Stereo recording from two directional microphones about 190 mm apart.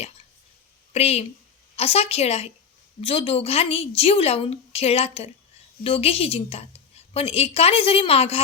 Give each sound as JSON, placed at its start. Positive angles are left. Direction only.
{"t": 0.9, "sound": "a woman's voice", "side_deg": 35}